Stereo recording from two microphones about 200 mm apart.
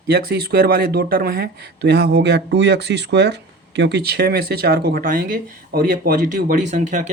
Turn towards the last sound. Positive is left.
turn(degrees=-35)  # may be behind; listen again after turning